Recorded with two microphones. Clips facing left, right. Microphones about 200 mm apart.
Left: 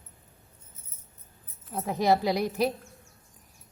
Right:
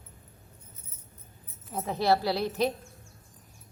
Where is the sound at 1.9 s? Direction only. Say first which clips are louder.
Left 2 dB; 15° left (ahead or behind).